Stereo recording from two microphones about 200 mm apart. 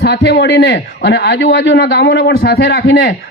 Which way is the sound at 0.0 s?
55° left (ahead or behind).